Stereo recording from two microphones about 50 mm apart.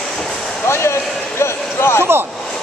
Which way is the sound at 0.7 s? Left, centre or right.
Left.